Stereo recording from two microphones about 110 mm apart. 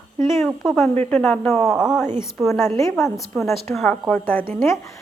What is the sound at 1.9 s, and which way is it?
Speech, 20° left (ahead or behind).